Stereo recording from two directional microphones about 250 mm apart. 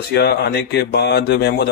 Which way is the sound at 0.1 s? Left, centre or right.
Left.